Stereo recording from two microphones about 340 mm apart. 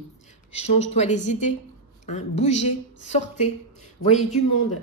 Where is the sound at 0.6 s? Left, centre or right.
Centre.